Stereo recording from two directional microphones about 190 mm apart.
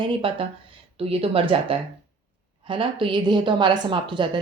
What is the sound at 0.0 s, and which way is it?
A woman's voice, 25° right (ahead or behind).